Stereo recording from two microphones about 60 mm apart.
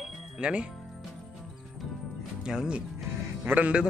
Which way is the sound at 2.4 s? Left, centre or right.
Centre.